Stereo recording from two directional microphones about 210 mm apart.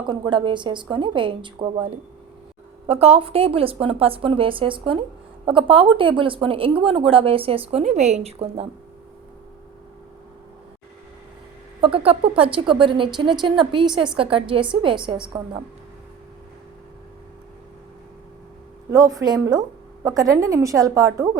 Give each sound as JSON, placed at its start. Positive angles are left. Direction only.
{"t": 0.0, "sound": "speech", "side_deg": -20}
{"t": 11.8, "sound": "speech", "side_deg": -25}
{"t": 18.9, "sound": "a woman's voice", "side_deg": -15}